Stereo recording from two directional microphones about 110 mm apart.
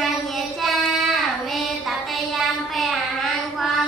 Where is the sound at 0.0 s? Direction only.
Centre (ahead or behind).